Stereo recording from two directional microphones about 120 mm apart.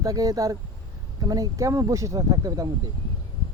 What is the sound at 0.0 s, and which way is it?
Speech, 30° right (ahead or behind).